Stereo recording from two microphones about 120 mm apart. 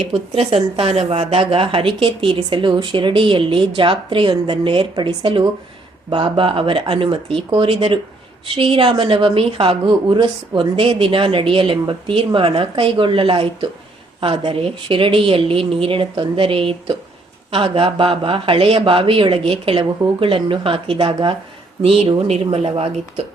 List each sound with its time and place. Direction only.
0.0 s speech: 50° right (ahead or behind)
21.8 s speech: 55° right (ahead or behind)